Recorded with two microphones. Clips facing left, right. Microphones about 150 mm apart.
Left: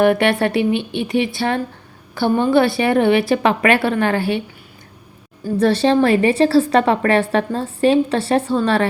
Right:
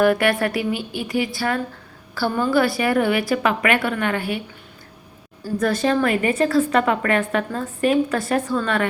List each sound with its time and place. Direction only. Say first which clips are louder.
0.0 s a woman's voice: left 3 dB; 25° left (ahead or behind)
5.5 s a woman's voice: left 5 dB; 30° left (ahead or behind)